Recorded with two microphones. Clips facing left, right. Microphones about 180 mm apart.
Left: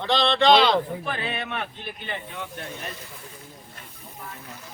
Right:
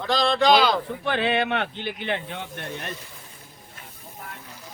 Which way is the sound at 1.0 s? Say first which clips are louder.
Right 7 dB; 85° right.